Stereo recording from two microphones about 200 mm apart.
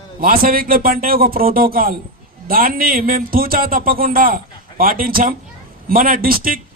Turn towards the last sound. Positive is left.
turn(degrees=-45)  # may be behind; listen again after turning